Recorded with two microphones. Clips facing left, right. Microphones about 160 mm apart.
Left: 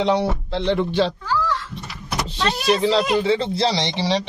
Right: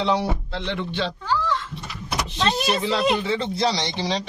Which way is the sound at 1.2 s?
25° right (ahead or behind).